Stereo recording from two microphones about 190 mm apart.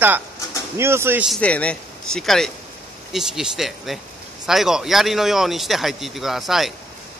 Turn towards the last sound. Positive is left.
turn(degrees=0)  # may be behind; listen again after turning